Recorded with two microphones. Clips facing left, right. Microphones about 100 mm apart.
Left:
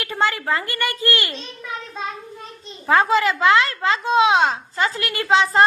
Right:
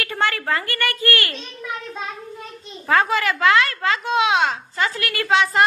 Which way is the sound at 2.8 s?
25° left (ahead or behind).